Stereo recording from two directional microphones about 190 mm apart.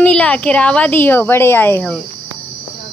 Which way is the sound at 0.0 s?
5° left (ahead or behind).